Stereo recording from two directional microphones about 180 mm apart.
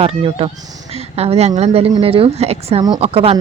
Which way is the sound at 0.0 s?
30° right (ahead or behind).